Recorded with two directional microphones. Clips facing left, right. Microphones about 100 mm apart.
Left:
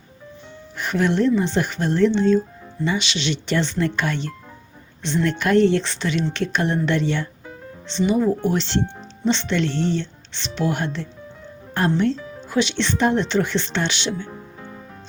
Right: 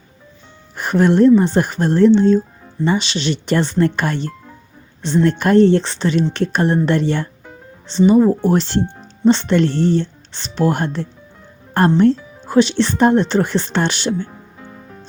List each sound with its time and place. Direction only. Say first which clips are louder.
0.8 s speech: right 7 dB; 45° right (ahead or behind)